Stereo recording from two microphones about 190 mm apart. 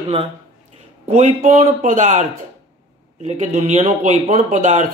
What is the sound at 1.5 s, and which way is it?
Speech, 40° right (ahead or behind).